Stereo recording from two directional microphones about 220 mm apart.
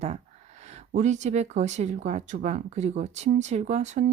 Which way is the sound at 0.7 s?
30° right (ahead or behind).